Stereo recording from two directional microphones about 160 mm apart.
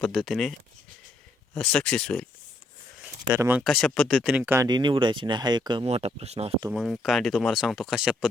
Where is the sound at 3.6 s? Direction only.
Centre (ahead or behind).